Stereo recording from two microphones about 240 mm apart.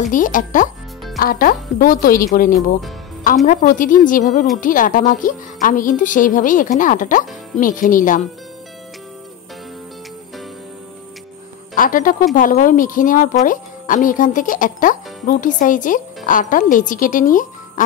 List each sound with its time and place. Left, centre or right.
0.0 s speech: left
3.4 s speech: left
11.7 s a woman's voice: left